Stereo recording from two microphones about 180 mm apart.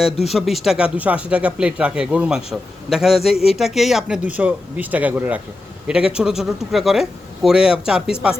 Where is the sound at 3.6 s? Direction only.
Centre (ahead or behind).